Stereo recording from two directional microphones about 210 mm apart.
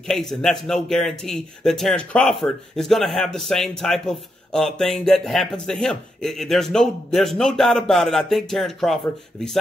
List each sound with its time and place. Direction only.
0.1 s a man's voice: centre (ahead or behind)